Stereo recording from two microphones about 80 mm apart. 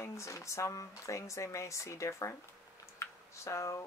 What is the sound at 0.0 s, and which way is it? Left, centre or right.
Speech, left.